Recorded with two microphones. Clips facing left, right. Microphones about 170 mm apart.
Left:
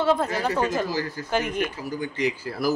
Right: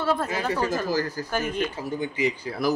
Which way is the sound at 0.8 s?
45° right (ahead or behind).